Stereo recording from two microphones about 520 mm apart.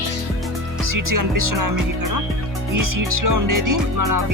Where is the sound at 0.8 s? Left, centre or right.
Right.